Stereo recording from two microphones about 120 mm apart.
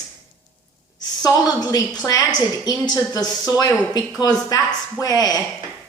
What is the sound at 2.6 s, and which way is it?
Speech, 30° left (ahead or behind).